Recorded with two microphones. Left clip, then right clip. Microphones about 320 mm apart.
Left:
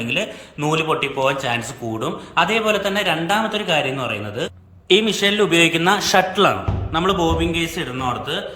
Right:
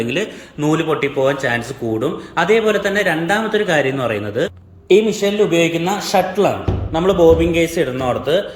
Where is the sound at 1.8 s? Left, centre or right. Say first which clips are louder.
Right 6 dB; centre.